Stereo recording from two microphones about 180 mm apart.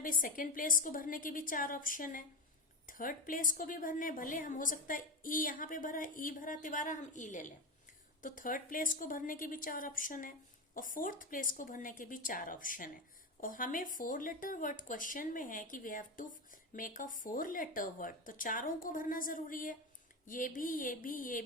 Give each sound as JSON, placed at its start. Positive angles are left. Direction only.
{"t": 0.0, "sound": "speech", "side_deg": 50}